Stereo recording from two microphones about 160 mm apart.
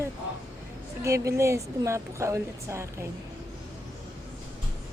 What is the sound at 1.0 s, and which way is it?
A woman's voice, 20° right (ahead or behind).